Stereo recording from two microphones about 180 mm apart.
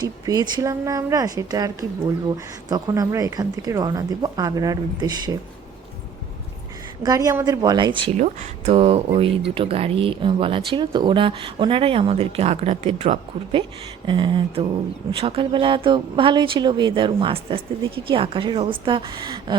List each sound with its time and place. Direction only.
0.0 s speech: 20° right (ahead or behind)
7.0 s speech: 20° right (ahead or behind)
8.1 s speech: 40° right (ahead or behind); by 19.5 s 25° right (ahead or behind)